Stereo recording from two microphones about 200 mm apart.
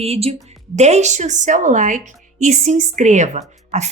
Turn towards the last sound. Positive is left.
turn(degrees=-35)  # may be behind; listen again after turning